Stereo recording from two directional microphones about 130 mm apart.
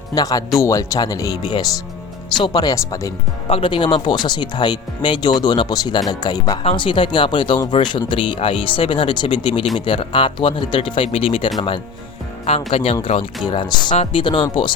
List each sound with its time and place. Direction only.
0.1 s speech: 30° left (ahead or behind)
2.4 s speech: 30° left (ahead or behind)
3.4 s speech: 40° left (ahead or behind)
6.6 s speech: 45° left (ahead or behind)
12.5 s speech: 50° left (ahead or behind)
13.9 s speech: 50° left (ahead or behind)